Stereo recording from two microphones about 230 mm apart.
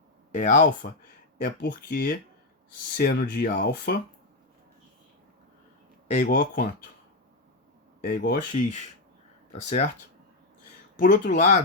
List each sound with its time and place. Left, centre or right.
0.3 s speech: left
6.1 s speech: left
8.0 s speech: left
9.5 s speech: left
10.9 s speech: left